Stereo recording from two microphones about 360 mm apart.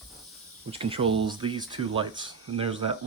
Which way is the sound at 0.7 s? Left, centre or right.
Centre.